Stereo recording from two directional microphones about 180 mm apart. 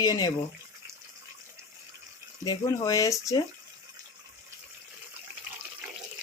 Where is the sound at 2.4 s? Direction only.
20° left (ahead or behind).